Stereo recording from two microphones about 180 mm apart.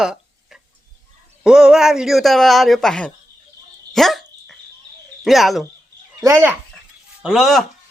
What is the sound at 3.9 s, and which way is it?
Dog, centre (ahead or behind).